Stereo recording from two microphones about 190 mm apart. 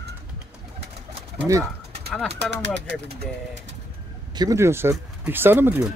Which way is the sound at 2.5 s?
70° right (ahead or behind).